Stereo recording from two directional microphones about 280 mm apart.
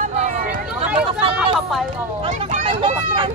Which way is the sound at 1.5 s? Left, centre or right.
Centre.